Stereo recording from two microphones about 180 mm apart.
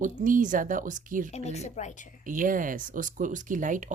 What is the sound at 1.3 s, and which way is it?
Speech, 40° left (ahead or behind).